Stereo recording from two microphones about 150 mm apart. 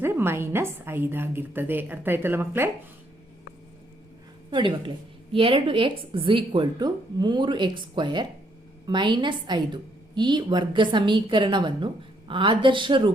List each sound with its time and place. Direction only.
0.0 s a woman's voice: 15° right (ahead or behind)
4.5 s a woman's voice: 35° right (ahead or behind)